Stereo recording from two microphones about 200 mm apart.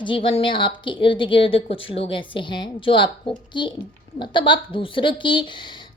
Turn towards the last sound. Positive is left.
turn(degrees=25)  # may be behind; listen again after turning